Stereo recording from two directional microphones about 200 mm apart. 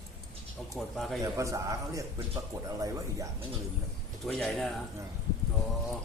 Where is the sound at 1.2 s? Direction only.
15° right (ahead or behind).